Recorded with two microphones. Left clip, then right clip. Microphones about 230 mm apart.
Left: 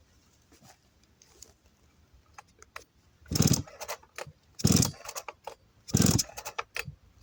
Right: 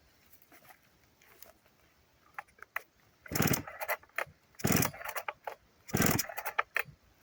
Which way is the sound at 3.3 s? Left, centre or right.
Left.